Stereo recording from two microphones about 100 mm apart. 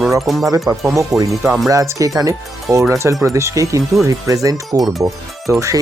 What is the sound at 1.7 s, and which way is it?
Speech, 35° right (ahead or behind).